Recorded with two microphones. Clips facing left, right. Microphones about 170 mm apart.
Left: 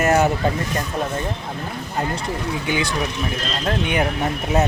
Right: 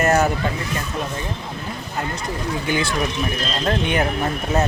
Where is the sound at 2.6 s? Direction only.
15° left (ahead or behind).